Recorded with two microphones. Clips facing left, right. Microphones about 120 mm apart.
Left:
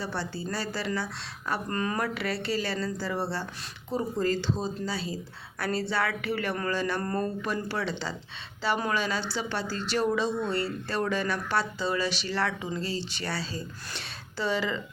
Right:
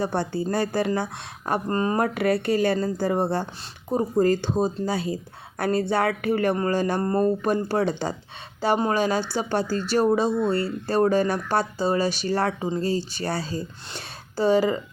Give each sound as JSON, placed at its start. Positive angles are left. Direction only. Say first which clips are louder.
{"t": 0.0, "sound": "speech", "louder": "right 8 dB", "side_deg": -50}
{"t": 1.6, "sound": "speech", "louder": "right 7 dB", "side_deg": -30}
{"t": 2.0, "sound": "speech", "louder": "right 8 dB", "side_deg": -50}
{"t": 7.0, "sound": "speech", "louder": "right 7 dB", "side_deg": -25}
{"t": 7.7, "sound": "speech", "louder": "right 8 dB", "side_deg": -50}